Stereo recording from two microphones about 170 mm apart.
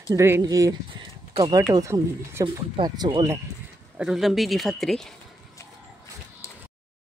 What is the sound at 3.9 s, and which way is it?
Speech, centre (ahead or behind).